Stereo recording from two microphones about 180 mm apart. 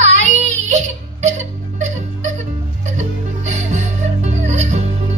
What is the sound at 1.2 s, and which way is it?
Music, 40° right (ahead or behind).